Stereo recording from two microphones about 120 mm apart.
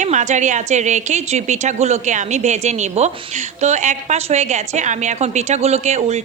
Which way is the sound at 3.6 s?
85° right.